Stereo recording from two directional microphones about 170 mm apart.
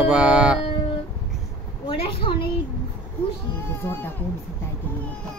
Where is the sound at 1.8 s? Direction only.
35° left (ahead or behind).